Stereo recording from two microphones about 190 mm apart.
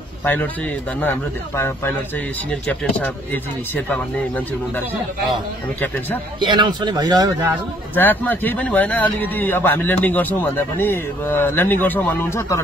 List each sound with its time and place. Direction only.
6.4 s a man's voice: 25° right (ahead or behind)
7.9 s speech: 10° left (ahead or behind)